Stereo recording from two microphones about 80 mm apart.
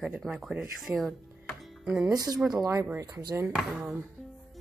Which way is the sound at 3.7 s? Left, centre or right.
Centre.